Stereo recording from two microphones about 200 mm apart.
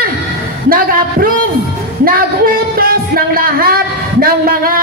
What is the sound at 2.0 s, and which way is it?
Speech, 45° right (ahead or behind).